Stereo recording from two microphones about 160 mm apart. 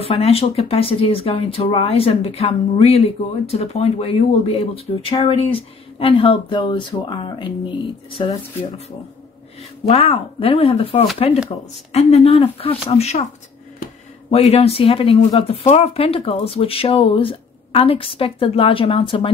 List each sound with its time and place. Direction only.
0.0 s speech: 35° left (ahead or behind)
9.8 s speech: 40° left (ahead or behind)
14.3 s speech: 40° left (ahead or behind)